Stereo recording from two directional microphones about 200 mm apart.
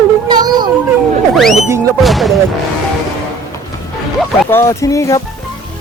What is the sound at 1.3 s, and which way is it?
Speech, centre (ahead or behind).